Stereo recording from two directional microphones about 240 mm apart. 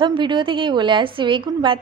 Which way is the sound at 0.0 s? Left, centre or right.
Centre.